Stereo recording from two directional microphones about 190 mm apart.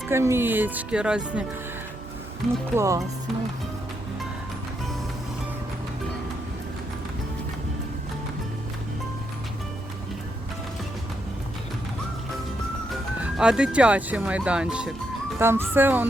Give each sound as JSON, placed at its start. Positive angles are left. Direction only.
{"t": 0.1, "sound": "speech", "side_deg": -15}
{"t": 2.7, "sound": "speech", "side_deg": -15}
{"t": 13.1, "sound": "speech", "side_deg": -5}